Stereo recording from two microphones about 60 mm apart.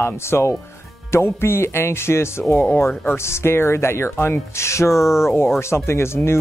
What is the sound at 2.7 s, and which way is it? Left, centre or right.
Speech, left.